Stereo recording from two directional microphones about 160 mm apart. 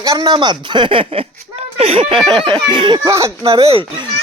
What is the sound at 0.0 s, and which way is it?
Speech, 25° right (ahead or behind).